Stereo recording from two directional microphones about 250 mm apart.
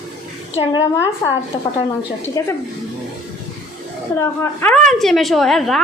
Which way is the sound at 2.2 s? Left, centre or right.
Centre.